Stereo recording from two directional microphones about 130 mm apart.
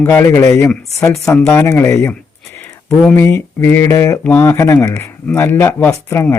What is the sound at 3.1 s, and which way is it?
Speech, 20° left (ahead or behind).